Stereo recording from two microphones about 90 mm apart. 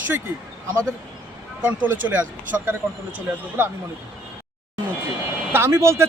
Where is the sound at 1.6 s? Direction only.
20° right (ahead or behind).